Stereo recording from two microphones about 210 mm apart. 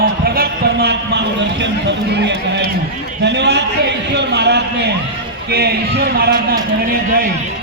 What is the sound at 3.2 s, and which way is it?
A man's voice, 55° right (ahead or behind).